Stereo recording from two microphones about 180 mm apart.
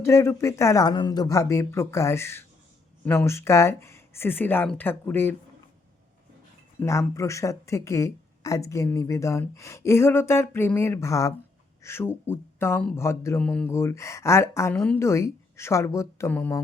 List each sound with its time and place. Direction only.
0.0 s speech: 15° left (ahead or behind)
6.7 s speech: 15° left (ahead or behind)